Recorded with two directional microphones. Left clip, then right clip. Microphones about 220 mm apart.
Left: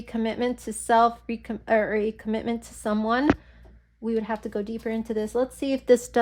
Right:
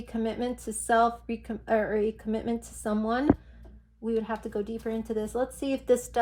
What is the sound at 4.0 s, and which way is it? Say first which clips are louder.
A woman's voice: left 2 dB; 40° left (ahead or behind).